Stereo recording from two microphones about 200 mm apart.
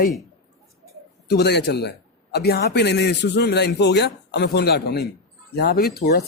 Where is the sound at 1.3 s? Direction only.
55° left (ahead or behind).